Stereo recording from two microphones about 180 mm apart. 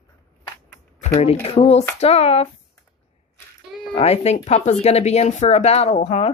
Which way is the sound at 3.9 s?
35° left (ahead or behind).